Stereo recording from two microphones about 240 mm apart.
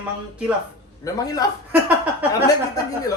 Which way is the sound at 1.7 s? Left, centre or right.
Centre.